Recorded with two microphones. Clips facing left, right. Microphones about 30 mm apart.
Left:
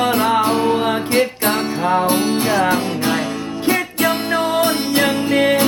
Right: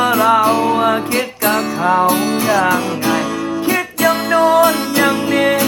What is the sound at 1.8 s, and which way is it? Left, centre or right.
Music, centre.